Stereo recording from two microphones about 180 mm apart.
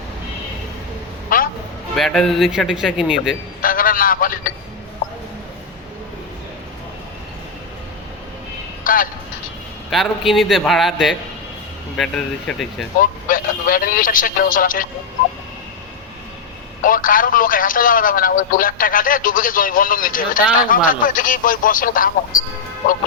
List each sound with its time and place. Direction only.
1.3 s vehicle: 50° left (ahead or behind)
2.0 s a man's voice: centre (ahead or behind)
3.6 s speech: 50° left (ahead or behind)
8.8 s music: 50° left (ahead or behind)
9.9 s a man's voice: centre (ahead or behind)
13.0 s speech: 50° left (ahead or behind)
16.8 s speech: 50° left (ahead or behind)